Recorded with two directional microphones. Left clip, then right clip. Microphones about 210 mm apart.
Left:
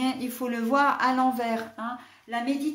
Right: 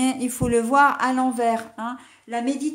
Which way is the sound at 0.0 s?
40° right (ahead or behind).